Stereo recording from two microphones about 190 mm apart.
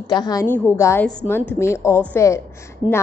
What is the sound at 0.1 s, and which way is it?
A woman's voice, 20° left (ahead or behind).